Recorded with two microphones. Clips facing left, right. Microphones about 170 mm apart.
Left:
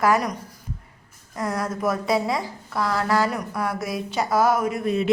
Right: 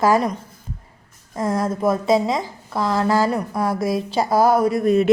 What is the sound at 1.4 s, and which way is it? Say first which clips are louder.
A woman's voice: right 5 dB; 25° right (ahead or behind).